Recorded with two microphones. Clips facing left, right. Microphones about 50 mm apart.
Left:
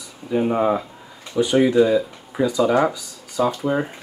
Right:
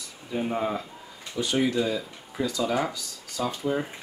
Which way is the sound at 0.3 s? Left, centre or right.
Centre.